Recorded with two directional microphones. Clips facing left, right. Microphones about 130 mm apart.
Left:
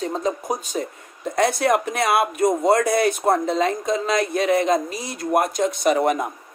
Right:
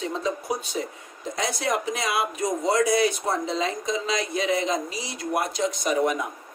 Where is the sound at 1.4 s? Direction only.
60° left (ahead or behind).